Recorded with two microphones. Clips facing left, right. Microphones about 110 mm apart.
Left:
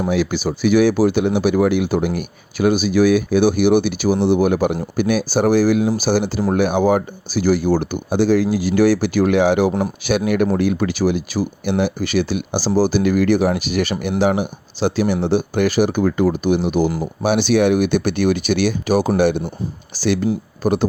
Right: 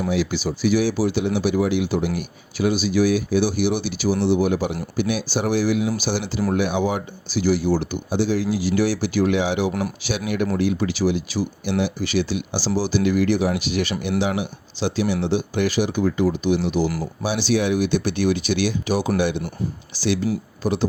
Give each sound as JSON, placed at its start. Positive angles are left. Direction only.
{"t": 0.1, "sound": "speech", "side_deg": 50}